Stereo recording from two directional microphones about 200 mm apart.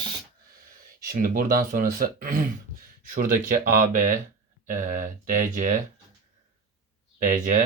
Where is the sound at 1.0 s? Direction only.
45° right (ahead or behind).